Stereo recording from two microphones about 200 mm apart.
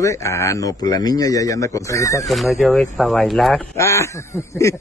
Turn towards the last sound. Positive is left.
turn(degrees=15)  # may be behind; listen again after turning